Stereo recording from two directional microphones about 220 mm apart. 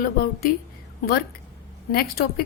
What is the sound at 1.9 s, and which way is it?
Speech, 45° left (ahead or behind).